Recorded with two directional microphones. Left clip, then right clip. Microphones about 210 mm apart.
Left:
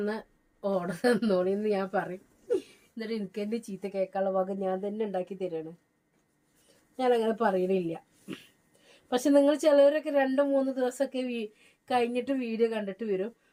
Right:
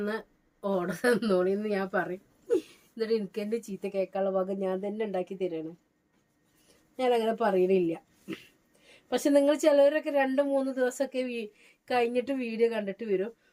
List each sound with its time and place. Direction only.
0.6 s a woman's voice: 20° right (ahead or behind)
6.9 s a woman's voice: 15° right (ahead or behind)